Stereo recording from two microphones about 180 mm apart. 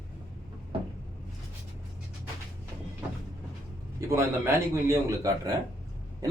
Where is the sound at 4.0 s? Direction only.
15° right (ahead or behind).